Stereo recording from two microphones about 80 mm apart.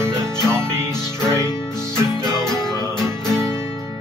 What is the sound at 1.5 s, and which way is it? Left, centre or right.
Music, centre.